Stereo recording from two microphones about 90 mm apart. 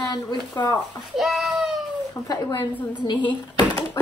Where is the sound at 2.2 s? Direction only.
45° left (ahead or behind).